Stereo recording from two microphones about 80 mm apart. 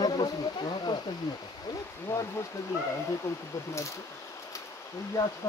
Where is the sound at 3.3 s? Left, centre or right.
Left.